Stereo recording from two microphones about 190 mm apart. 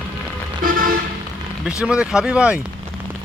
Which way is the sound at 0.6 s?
45° right (ahead or behind).